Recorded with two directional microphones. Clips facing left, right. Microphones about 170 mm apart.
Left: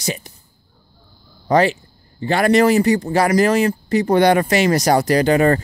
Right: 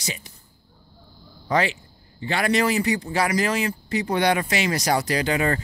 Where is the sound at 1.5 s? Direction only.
40° left (ahead or behind).